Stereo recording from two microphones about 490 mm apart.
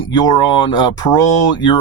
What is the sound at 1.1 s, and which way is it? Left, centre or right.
Speech, left.